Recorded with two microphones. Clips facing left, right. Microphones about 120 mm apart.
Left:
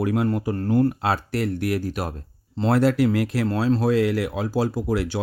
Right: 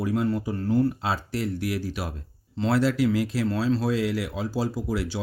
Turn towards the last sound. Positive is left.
turn(degrees=60)  # may be behind; listen again after turning